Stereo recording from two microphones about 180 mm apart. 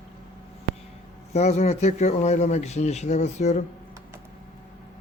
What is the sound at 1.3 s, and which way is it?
Speech, 40° left (ahead or behind).